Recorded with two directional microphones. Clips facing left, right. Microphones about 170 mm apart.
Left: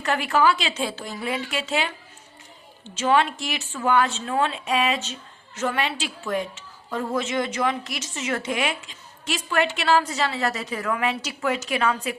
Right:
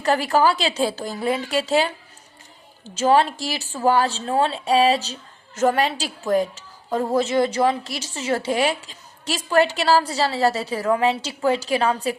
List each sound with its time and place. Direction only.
0.0 s a woman's voice: 35° right (ahead or behind)
3.0 s a woman's voice: 35° right (ahead or behind)